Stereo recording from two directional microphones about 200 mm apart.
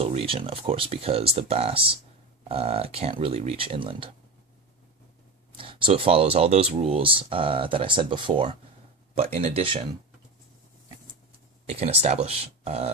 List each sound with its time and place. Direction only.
0.0 s speech: 30° right (ahead or behind)
5.5 s speech: 25° right (ahead or behind)
11.6 s speech: 30° right (ahead or behind)